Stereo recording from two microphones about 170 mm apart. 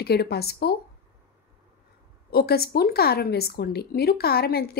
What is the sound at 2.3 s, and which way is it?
Speech, 65° left (ahead or behind).